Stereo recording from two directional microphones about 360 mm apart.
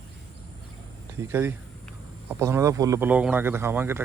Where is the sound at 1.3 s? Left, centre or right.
Centre.